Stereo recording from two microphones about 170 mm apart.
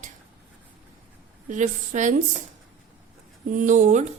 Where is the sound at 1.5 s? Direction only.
45° right (ahead or behind).